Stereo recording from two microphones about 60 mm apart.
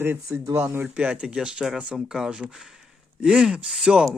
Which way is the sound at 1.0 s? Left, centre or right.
Centre.